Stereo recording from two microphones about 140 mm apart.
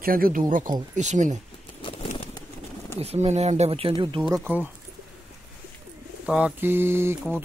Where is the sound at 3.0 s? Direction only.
50° right (ahead or behind).